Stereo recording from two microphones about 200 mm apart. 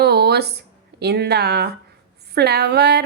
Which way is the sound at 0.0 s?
55° right (ahead or behind).